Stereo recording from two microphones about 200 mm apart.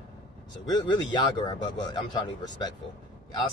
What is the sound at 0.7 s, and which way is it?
Speech, 20° left (ahead or behind).